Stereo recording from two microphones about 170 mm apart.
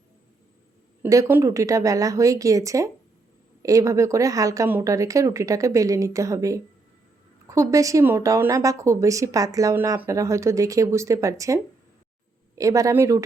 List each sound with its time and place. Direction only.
1.0 s speech: 15° right (ahead or behind)